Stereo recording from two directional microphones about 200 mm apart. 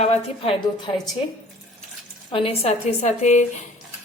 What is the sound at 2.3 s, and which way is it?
A woman's voice, 30° left (ahead or behind).